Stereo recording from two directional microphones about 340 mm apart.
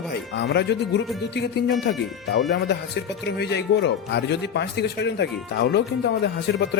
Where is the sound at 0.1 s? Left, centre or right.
Left.